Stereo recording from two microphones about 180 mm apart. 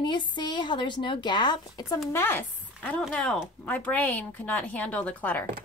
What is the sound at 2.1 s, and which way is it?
Speech, 10° left (ahead or behind).